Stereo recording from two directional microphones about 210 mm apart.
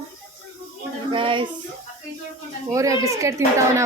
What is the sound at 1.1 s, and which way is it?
Child singing, 25° right (ahead or behind).